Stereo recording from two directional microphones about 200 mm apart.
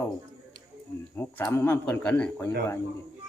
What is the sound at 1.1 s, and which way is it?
Speech, 10° left (ahead or behind).